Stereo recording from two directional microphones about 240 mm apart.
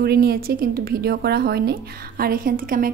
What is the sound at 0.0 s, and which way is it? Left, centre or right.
A woman's voice, right.